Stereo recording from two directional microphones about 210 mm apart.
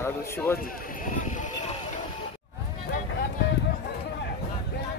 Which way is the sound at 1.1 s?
35° left (ahead or behind).